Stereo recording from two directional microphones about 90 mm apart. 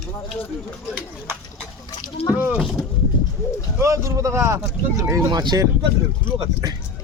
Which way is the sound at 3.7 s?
35° right (ahead or behind).